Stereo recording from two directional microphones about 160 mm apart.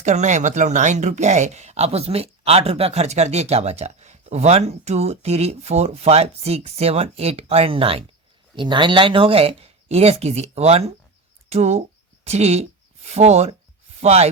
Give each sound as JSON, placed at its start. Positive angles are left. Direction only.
{"t": 0.0, "sound": "speech", "side_deg": -45}